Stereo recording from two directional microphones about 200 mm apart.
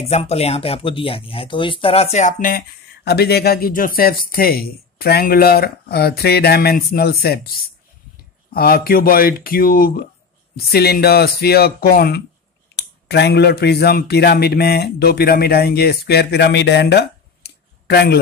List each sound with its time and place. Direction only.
0.0 s speech: 30° left (ahead or behind); by 18.1 s 55° left (ahead or behind)